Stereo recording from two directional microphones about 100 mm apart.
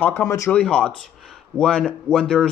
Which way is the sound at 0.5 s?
10° left (ahead or behind).